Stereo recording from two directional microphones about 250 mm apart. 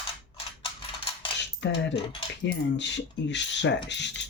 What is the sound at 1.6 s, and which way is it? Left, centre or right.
Cutlery, left.